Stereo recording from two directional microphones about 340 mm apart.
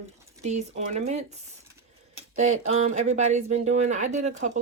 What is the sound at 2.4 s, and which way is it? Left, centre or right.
Speech, right.